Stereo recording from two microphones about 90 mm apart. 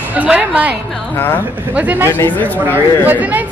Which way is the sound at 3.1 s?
20° right (ahead or behind).